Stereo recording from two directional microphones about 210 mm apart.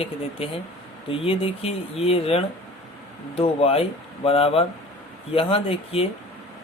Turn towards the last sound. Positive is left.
turn(degrees=25)  # may be behind; listen again after turning